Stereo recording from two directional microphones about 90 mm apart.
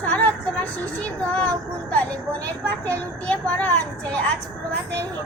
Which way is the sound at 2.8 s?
15° left (ahead or behind).